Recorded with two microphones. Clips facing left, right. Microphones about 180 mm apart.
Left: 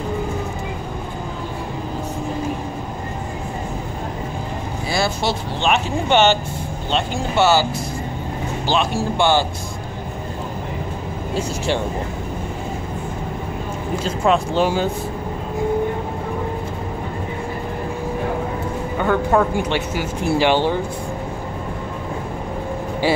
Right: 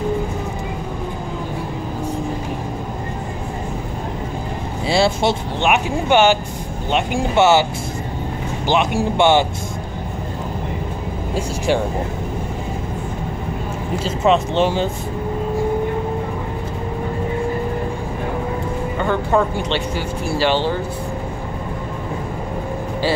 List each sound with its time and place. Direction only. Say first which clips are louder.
4.8 s vehicle: right 5 dB; 25° right (ahead or behind)
5.6 s speech: right 1 dB; 10° right (ahead or behind)
8.6 s speech: right 3 dB; 20° right (ahead or behind)
11.3 s speech: right 2 dB; 10° right (ahead or behind)
14.0 s speech: right 2 dB; 5° right (ahead or behind)
18.9 s speech: left 1 dB; 5° left (ahead or behind)